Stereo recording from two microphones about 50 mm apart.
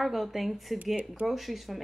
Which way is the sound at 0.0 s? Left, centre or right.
Centre.